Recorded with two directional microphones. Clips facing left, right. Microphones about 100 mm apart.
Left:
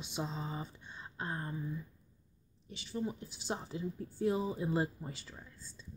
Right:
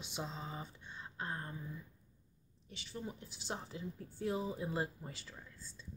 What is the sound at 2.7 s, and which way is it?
Speech, 10° left (ahead or behind).